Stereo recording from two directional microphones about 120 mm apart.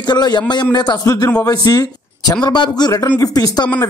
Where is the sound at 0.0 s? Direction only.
35° left (ahead or behind).